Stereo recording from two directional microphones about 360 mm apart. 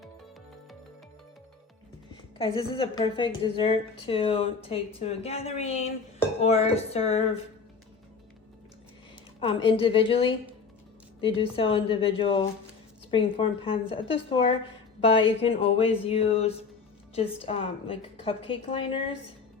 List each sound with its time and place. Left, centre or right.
2.4 s a woman's voice: centre
9.4 s a woman's voice: centre